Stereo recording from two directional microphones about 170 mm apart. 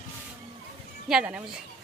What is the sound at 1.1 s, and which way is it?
Speech, 5° right (ahead or behind).